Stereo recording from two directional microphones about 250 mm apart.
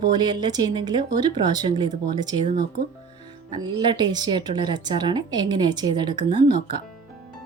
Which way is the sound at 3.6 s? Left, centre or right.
Centre.